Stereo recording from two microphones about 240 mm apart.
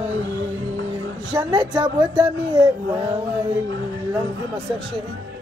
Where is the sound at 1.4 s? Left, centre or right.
Centre.